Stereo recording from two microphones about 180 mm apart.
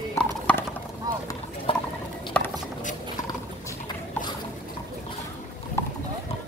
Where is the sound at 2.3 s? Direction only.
5° left (ahead or behind).